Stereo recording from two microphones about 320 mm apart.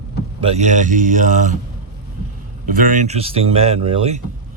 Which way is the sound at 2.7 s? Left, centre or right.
Right.